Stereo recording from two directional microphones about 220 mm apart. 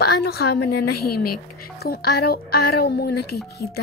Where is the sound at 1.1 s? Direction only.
90° left.